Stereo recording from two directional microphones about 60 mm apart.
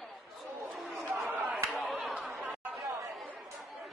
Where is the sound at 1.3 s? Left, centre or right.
Right.